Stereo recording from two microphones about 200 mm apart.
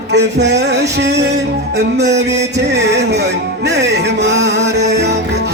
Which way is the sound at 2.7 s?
60° right (ahead or behind).